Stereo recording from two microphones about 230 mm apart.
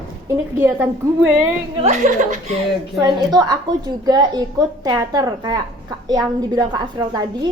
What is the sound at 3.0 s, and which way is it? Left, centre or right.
A woman's voice, centre.